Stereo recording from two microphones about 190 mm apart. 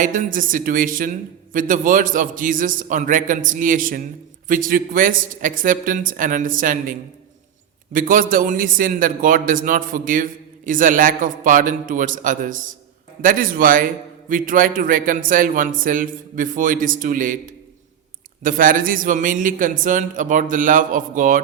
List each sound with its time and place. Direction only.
0.0 s a man's voice: 45° right (ahead or behind)
7.9 s a man's voice: 45° right (ahead or behind)